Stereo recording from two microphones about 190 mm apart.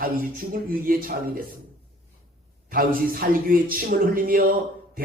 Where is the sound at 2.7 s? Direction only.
50° right (ahead or behind).